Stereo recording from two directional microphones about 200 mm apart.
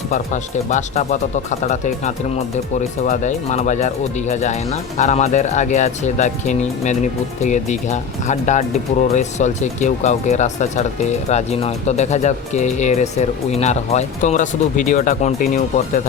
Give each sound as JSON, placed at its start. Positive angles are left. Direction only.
{"t": 0.7, "sound": "speech", "side_deg": 35}